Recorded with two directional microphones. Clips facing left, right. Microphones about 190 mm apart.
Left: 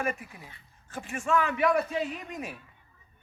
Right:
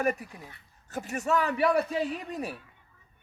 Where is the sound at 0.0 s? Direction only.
40° right (ahead or behind).